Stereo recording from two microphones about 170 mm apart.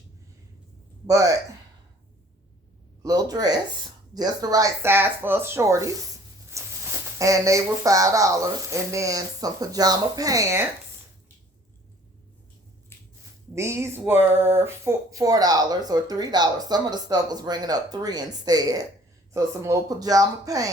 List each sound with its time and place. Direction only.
1.0 s speech: 20° right (ahead or behind)
3.0 s speech: 20° right (ahead or behind)
6.5 s a sound: 20° right (ahead or behind)
7.2 s speech: 20° right (ahead or behind)
12.9 s a sound: 15° left (ahead or behind)
13.6 s speech: 15° right (ahead or behind)